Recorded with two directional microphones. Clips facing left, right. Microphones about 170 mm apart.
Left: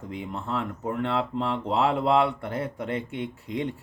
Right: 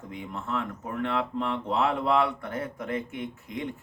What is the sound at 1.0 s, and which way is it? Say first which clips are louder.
Speech: even; 30° left (ahead or behind).